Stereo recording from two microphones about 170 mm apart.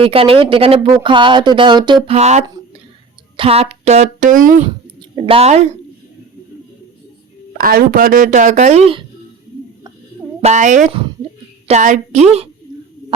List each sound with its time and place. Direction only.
0.0 s speech: 35° right (ahead or behind)
2.1 s speech: 40° right (ahead or behind)
4.9 s a woman's voice: 30° right (ahead or behind)
7.6 s speech: 60° right (ahead or behind); by 9.0 s 35° right (ahead or behind)
10.4 s speech: 45° right (ahead or behind)